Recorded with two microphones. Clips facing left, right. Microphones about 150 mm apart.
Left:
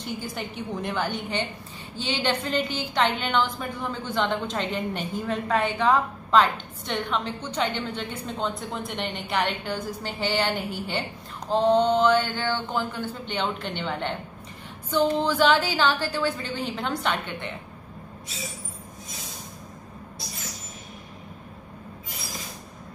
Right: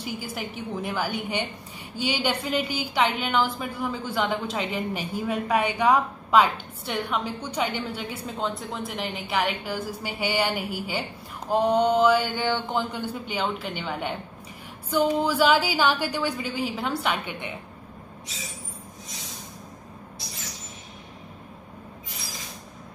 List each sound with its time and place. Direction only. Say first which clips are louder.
0.0 s a woman's voice: even; 5° right (ahead or behind)